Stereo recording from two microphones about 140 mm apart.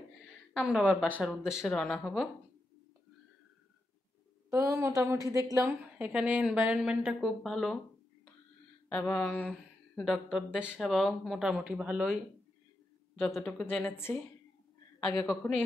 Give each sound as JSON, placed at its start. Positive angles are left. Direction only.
{"t": 0.5, "sound": "a woman's voice", "side_deg": 0}
{"t": 4.5, "sound": "a woman's voice", "side_deg": -20}
{"t": 5.9, "sound": "speech", "side_deg": -10}
{"t": 8.8, "sound": "a sound", "side_deg": 10}
{"t": 10.0, "sound": "speech", "side_deg": 0}
{"t": 13.2, "sound": "a woman's voice", "side_deg": 10}